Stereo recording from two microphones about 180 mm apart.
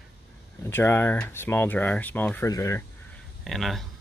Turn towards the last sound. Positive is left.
turn(degrees=0)  # may be behind; listen again after turning